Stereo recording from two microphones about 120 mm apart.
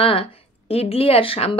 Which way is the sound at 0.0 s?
50° left (ahead or behind).